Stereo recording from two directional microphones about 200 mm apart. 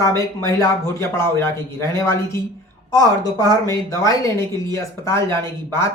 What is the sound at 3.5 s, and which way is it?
Speech, 15° left (ahead or behind).